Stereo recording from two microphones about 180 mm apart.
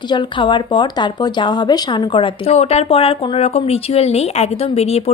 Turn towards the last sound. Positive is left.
turn(degrees=35)  # may be behind; listen again after turning